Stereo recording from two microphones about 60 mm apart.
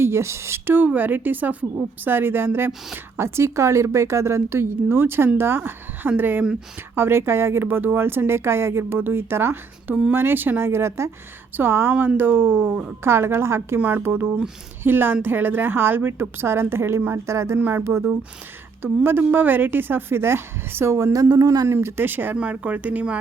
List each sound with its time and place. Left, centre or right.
0.0 s a woman's voice: right
0.9 s a woman's voice: right
13.7 s a woman's voice: right
17.6 s a woman's voice: right
21.7 s speech: right
22.4 s speech: right